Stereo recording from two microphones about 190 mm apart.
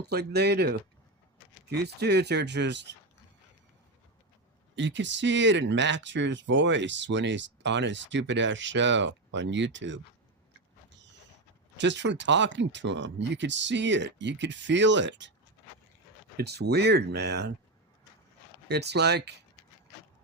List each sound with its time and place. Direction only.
0.0 s speech: 60° right (ahead or behind)
4.7 s speech: 70° right (ahead or behind)
11.8 s speech: 70° right (ahead or behind)
16.4 s speech: 60° right (ahead or behind)
18.7 s speech: 60° right (ahead or behind)